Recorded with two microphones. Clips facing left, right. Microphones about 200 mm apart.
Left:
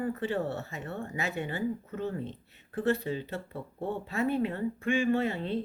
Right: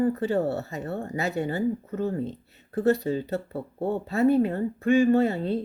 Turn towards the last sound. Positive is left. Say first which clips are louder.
# right 7 dB
turn(degrees=-40)  # may be behind; listen again after turning